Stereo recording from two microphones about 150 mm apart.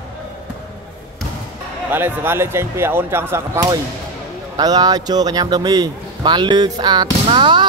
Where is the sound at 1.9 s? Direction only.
15° right (ahead or behind).